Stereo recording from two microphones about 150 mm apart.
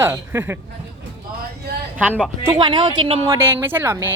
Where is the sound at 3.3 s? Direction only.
15° right (ahead or behind).